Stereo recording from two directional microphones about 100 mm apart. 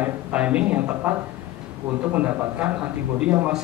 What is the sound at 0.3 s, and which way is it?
Speech, 10° right (ahead or behind).